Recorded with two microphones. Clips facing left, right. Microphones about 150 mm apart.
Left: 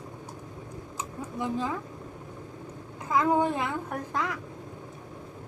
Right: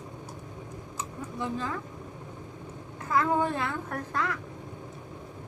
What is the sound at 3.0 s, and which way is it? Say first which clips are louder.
A woman's voice: left 2 dB; 15° left (ahead or behind).